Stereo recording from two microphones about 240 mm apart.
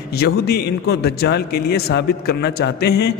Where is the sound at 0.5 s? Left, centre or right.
Left.